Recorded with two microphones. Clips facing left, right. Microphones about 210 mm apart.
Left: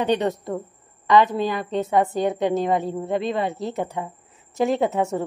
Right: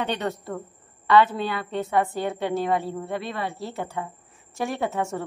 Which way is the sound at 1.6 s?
20° left (ahead or behind).